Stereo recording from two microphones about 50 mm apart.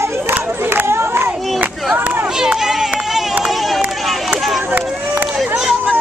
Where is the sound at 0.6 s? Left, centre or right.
Right.